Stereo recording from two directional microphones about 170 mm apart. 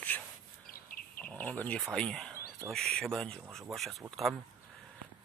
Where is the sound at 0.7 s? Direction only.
60° left (ahead or behind).